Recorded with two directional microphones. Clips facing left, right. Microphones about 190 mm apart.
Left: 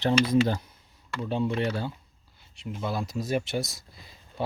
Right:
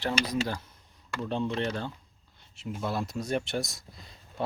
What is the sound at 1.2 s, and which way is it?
Speech, 5° left (ahead or behind).